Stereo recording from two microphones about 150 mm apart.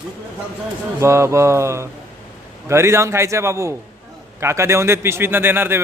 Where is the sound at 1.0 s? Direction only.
20° right (ahead or behind).